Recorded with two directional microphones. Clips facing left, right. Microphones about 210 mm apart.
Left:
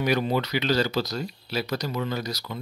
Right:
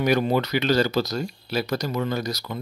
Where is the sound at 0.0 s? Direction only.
50° right (ahead or behind).